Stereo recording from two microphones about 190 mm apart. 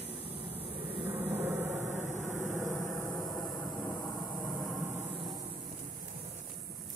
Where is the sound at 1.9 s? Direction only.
40° right (ahead or behind).